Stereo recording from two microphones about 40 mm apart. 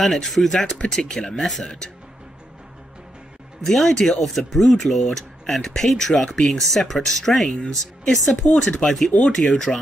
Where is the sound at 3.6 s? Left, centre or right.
Centre.